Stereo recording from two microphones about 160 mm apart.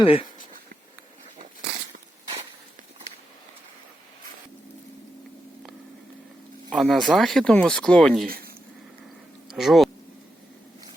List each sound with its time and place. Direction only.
0.0 s speech: 35° left (ahead or behind)
6.7 s speech: centre (ahead or behind)
9.5 s speech: centre (ahead or behind)